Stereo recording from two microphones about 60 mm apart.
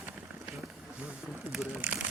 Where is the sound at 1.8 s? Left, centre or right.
Right.